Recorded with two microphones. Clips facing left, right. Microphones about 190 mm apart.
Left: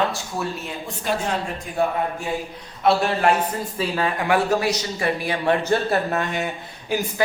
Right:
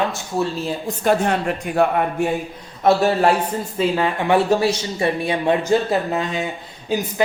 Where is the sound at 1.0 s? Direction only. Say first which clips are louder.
Right 6 dB; 55° right (ahead or behind); by 2.3 s 70° right (ahead or behind).